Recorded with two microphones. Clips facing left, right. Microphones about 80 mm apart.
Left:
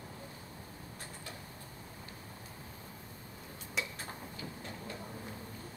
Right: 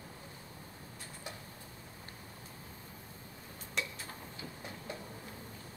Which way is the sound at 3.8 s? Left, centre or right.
Centre.